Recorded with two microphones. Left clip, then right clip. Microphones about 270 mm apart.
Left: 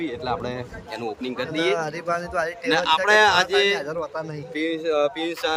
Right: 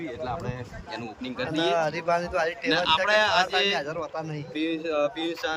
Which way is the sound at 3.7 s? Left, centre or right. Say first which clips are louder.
Left 3 dB; centre.